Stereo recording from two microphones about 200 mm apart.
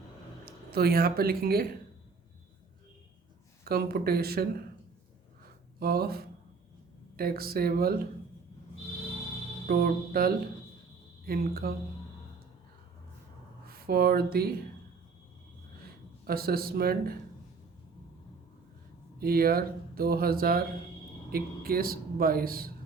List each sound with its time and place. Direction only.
0.4 s speech: 50° right (ahead or behind)
3.6 s speech: 50° right (ahead or behind)
5.8 s speech: 50° right (ahead or behind)
9.6 s speech: 50° right (ahead or behind)
13.7 s speech: 50° right (ahead or behind)
16.2 s speech: 50° right (ahead or behind)
19.2 s speech: 50° right (ahead or behind)